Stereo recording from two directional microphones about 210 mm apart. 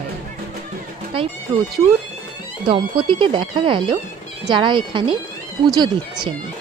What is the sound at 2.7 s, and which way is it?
Speech, 25° right (ahead or behind).